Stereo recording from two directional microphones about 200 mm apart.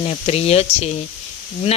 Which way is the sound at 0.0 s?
30° left (ahead or behind).